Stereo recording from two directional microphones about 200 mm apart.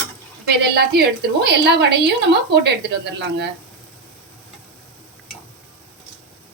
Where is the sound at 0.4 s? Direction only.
55° right (ahead or behind).